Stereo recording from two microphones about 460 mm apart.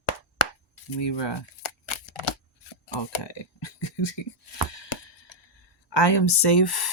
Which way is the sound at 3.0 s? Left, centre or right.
Left.